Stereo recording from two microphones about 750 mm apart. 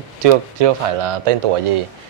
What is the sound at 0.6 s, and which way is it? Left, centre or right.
Speech, right.